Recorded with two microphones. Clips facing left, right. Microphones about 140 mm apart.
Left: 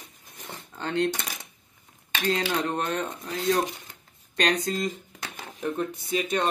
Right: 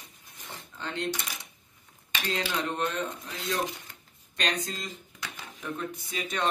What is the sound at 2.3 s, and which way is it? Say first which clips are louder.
Speech: left 2 dB; 45° left (ahead or behind).